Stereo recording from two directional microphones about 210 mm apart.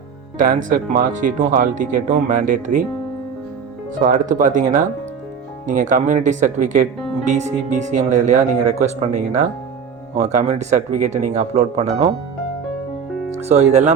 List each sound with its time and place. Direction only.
0.3 s speech: 40° right (ahead or behind)
4.0 s speech: 40° right (ahead or behind)
13.3 s speech: 30° right (ahead or behind)